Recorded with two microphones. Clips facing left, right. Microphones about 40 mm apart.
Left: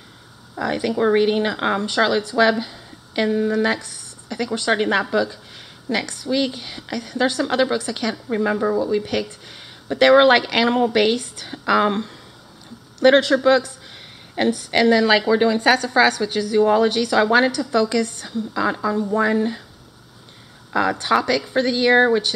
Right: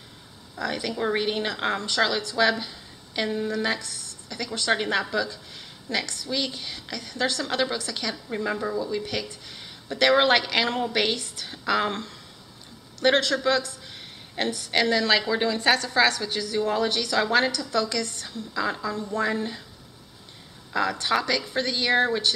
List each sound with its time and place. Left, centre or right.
0.6 s a woman's voice: left
0.9 s a woman's voice: centre
2.6 s a sound: centre
3.4 s a woman's voice: left
3.8 s a sound: left
4.6 s a woman's voice: left
8.1 s a woman's voice: centre
9.3 s a woman's voice: left
11.4 s a woman's voice: centre
14.7 s a woman's voice: centre
20.7 s a woman's voice: left